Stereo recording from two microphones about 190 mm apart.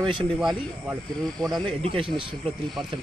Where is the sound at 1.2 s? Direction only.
5° left (ahead or behind).